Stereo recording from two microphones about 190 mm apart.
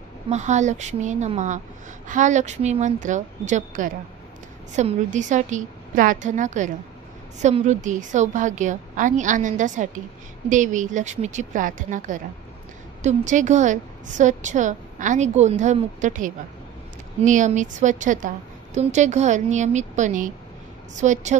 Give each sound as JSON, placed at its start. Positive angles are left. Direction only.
{"t": 0.3, "sound": "a woman's voice", "side_deg": -40}